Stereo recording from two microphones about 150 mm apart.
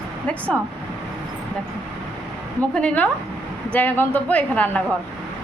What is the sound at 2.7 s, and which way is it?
Speech, 10° left (ahead or behind).